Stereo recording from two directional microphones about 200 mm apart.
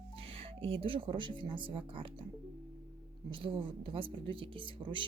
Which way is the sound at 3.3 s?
25° right (ahead or behind).